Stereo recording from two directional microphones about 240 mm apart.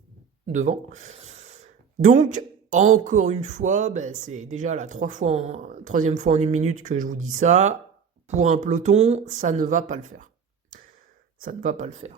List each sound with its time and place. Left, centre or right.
0.4 s speech: right
11.3 s speech: right